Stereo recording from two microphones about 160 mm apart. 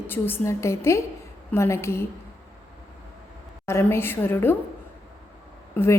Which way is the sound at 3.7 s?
15° left (ahead or behind).